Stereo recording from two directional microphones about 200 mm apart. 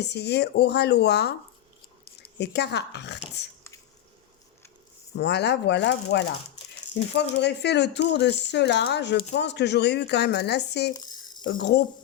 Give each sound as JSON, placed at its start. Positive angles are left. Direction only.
{"t": 0.0, "sound": "speech", "side_deg": 55}
{"t": 2.4, "sound": "speech", "side_deg": 55}
{"t": 5.1, "sound": "speech", "side_deg": 55}